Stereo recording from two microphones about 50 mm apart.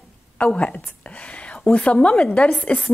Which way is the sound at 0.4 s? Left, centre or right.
Left.